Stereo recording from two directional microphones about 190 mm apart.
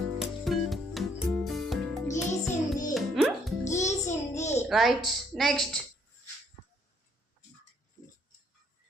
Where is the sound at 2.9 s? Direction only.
Centre (ahead or behind).